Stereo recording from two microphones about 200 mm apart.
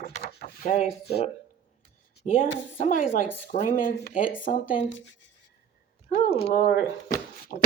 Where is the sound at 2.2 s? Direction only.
40° left (ahead or behind).